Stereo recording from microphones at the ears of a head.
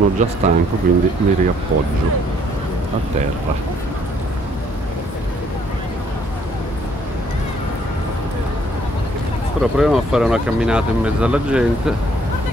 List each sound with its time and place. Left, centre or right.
0.0 s speech: right
9.8 s speech: centre